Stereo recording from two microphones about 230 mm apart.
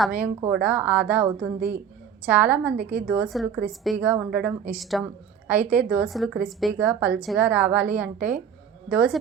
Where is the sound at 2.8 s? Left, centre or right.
Right.